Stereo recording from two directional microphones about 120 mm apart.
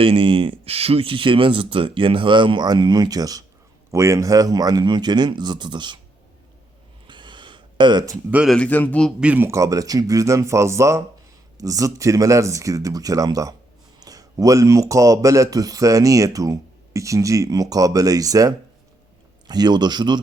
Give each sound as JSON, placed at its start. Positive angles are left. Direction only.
{"t": 0.0, "sound": "speech", "side_deg": -50}
{"t": 7.1, "sound": "a sound", "side_deg": -40}
{"t": 8.4, "sound": "speech", "side_deg": 10}
{"t": 9.2, "sound": "speech", "side_deg": -15}
{"t": 9.5, "sound": "speech", "side_deg": -25}